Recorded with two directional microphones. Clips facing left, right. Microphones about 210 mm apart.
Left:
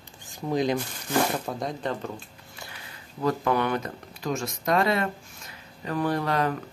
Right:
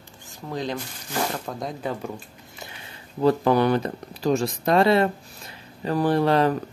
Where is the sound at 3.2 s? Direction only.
35° right (ahead or behind).